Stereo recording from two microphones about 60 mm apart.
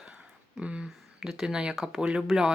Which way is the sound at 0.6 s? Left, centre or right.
Centre.